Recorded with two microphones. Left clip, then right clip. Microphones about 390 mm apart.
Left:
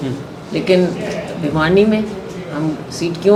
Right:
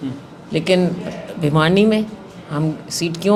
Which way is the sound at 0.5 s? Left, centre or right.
Right.